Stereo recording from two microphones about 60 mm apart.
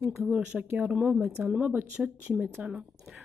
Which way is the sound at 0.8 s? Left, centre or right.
Right.